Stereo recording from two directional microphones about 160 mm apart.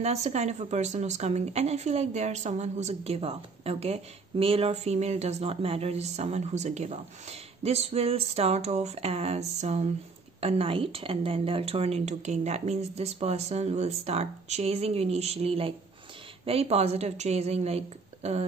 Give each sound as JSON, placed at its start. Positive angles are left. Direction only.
{"t": 0.0, "sound": "speech", "side_deg": -45}